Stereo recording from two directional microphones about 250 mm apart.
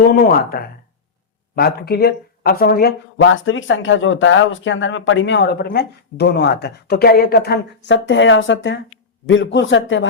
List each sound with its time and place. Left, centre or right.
0.1 s speech: left